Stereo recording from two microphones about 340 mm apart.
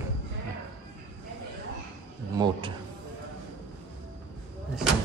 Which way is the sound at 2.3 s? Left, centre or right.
Centre.